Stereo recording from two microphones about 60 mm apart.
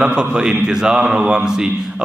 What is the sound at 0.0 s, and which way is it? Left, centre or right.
A man's voice, centre.